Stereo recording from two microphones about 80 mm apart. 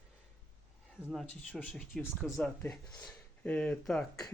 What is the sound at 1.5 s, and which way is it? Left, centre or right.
Speech, centre.